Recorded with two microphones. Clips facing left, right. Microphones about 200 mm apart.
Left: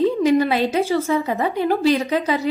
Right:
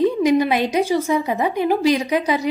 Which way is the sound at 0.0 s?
15° right (ahead or behind).